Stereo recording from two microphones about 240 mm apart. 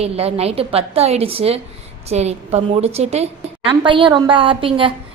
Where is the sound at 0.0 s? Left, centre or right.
Right.